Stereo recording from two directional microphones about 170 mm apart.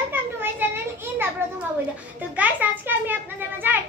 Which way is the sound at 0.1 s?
10° right (ahead or behind).